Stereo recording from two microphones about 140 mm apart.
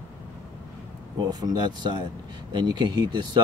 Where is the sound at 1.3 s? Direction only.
30° right (ahead or behind).